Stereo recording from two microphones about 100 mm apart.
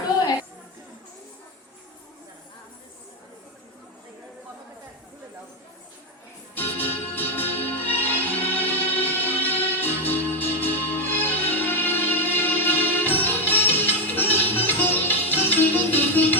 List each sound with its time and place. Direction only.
6.6 s music: 20° left (ahead or behind)